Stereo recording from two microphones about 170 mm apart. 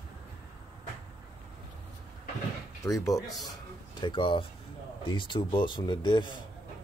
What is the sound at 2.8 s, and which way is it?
Speech, 20° left (ahead or behind).